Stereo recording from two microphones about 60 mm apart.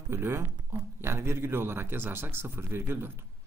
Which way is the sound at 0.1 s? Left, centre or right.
Right.